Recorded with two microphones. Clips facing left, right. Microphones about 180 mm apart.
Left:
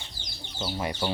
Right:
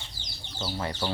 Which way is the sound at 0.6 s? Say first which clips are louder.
Left 2 dB; 15° left (ahead or behind).